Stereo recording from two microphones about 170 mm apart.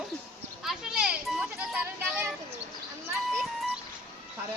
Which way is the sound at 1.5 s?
10° right (ahead or behind).